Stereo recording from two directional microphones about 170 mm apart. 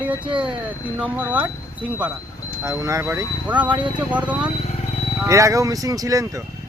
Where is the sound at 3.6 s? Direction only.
30° right (ahead or behind).